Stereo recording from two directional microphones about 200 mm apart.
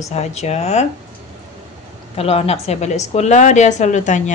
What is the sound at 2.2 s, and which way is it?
A woman's voice, 30° left (ahead or behind).